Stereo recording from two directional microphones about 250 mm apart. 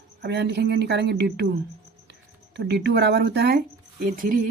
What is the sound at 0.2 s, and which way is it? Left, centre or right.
Speech, right.